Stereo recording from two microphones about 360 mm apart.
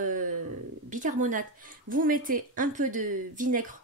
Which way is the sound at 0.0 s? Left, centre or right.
Right.